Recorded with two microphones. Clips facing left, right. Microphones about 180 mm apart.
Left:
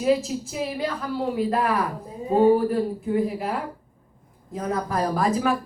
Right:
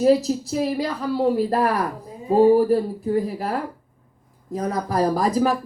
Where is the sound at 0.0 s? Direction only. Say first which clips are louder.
Right 5 dB; 40° right (ahead or behind).